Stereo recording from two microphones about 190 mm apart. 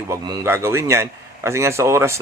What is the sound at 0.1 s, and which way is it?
Speech, 20° right (ahead or behind).